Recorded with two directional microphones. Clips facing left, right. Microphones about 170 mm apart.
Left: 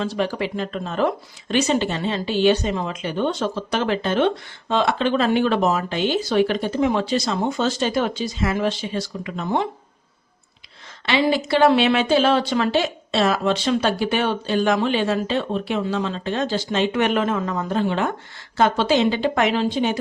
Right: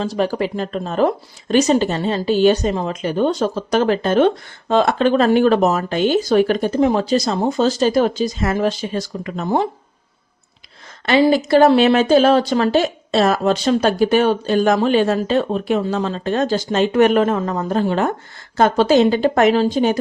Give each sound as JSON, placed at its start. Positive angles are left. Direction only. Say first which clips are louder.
{"t": 0.0, "sound": "speech", "louder": "right 4 dB", "side_deg": -40}
{"t": 11.0, "sound": "speech", "louder": "right 6 dB", "side_deg": -45}